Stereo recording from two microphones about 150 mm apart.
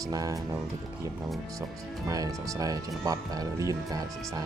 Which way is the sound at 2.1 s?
25° right (ahead or behind).